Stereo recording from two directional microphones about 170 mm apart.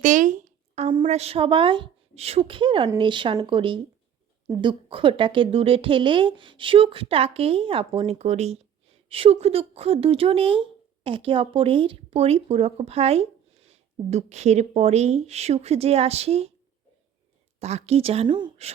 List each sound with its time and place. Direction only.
0.0 s a sound: 50° right (ahead or behind)
1.0 s speech: 40° right (ahead or behind)
17.6 s speech: 40° right (ahead or behind)